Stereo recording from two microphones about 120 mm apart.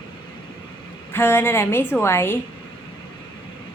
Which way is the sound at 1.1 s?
20° left (ahead or behind).